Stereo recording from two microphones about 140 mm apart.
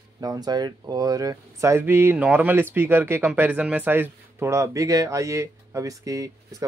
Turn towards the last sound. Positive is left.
turn(degrees=-25)  # may be behind; listen again after turning